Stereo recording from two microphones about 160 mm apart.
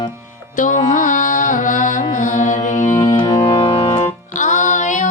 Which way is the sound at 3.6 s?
40° left (ahead or behind).